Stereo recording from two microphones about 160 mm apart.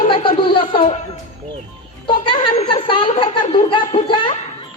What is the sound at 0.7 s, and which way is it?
Speech, 45° left (ahead or behind).